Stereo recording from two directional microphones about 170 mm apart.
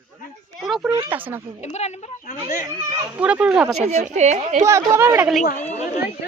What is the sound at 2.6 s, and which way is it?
Speech, 15° right (ahead or behind).